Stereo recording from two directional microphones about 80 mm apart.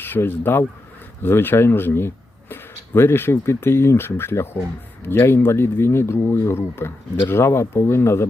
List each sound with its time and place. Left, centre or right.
0.0 s speech: left